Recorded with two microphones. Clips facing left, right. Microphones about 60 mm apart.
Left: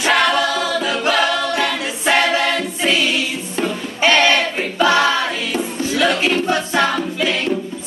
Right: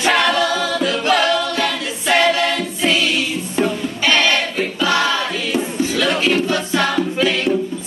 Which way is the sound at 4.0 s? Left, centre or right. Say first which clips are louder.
Left 3 dB; left.